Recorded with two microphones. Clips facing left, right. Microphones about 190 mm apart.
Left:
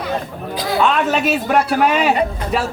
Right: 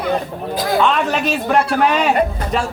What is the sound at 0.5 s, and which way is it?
Speech, 45° right (ahead or behind).